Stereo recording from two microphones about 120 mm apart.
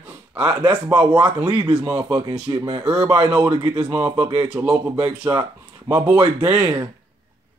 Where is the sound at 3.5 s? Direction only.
35° right (ahead or behind).